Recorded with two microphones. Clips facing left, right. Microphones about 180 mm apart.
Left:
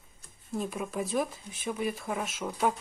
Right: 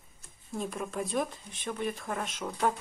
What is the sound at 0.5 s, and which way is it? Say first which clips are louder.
Speech: left 2 dB; 5° left (ahead or behind).